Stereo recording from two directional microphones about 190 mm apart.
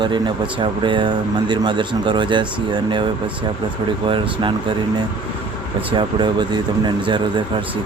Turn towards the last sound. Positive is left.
turn(degrees=-25)  # may be behind; listen again after turning